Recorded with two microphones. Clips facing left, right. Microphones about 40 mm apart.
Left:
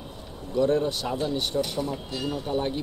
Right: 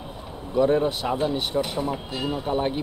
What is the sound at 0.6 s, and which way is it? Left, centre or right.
Speech, centre.